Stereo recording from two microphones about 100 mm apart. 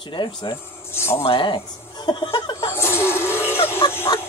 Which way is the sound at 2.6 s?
25° left (ahead or behind).